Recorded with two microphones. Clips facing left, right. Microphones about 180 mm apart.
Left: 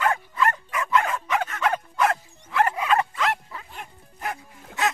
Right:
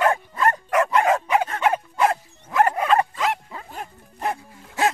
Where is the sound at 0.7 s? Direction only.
75° right (ahead or behind).